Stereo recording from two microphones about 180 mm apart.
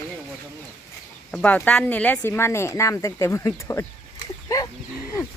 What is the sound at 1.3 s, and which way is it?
Speech, 5° left (ahead or behind).